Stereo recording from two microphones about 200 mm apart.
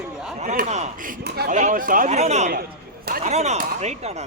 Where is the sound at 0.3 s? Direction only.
35° right (ahead or behind).